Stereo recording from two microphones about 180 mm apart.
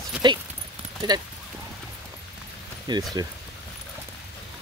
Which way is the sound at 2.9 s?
25° right (ahead or behind).